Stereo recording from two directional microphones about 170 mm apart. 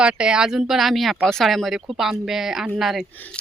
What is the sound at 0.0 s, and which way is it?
Speech, 5° right (ahead or behind).